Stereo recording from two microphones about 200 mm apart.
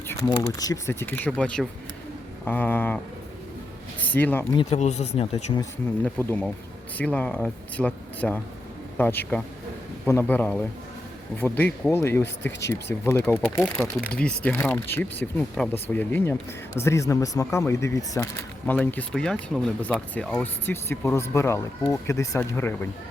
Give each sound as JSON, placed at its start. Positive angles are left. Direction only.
{"t": 0.3, "sound": "speech", "side_deg": 15}
{"t": 4.1, "sound": "speech", "side_deg": 10}
{"t": 4.5, "sound": "speech", "side_deg": 35}
{"t": 7.0, "sound": "speech", "side_deg": 5}